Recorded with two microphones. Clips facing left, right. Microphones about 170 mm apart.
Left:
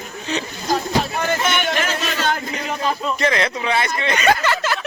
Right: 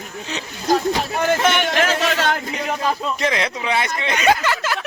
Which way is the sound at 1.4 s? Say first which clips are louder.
Right 3 dB; 90° right.